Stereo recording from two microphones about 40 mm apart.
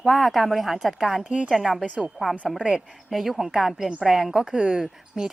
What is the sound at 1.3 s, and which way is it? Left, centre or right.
Speech, right.